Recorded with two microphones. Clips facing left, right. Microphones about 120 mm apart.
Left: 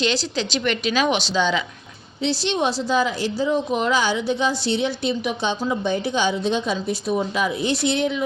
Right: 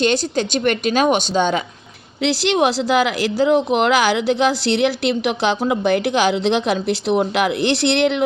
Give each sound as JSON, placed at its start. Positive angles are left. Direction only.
{"t": 0.0, "sound": "a woman's voice", "side_deg": -50}
{"t": 2.2, "sound": "speech", "side_deg": -90}